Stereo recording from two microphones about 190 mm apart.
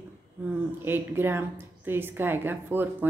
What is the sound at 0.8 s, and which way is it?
Speech, 10° right (ahead or behind).